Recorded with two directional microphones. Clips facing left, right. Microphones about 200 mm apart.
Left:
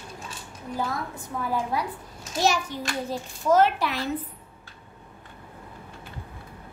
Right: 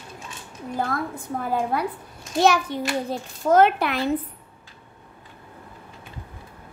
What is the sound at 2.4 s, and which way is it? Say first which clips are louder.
A child's voice: right 5 dB; 60° right (ahead or behind).